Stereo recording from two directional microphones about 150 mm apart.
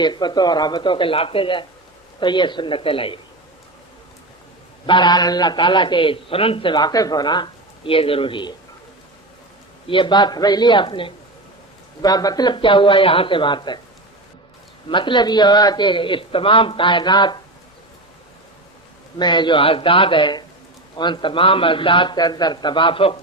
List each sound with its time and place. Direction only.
0.0 s a man's voice: 30° left (ahead or behind)
4.9 s a man's voice: 30° left (ahead or behind)
9.8 s a man's voice: 35° left (ahead or behind)
14.8 s a man's voice: 35° left (ahead or behind)
19.2 s a man's voice: 30° left (ahead or behind)